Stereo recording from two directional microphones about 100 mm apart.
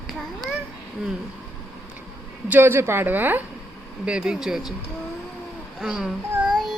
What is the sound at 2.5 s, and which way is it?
A woman's voice, 20° right (ahead or behind).